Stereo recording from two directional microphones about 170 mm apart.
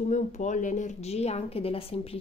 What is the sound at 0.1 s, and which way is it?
Speech, 45° left (ahead or behind).